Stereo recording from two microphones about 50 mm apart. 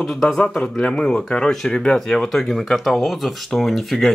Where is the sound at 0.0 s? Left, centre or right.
Centre.